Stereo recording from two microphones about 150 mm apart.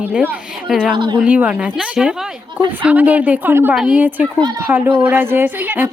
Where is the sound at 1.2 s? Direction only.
10° right (ahead or behind).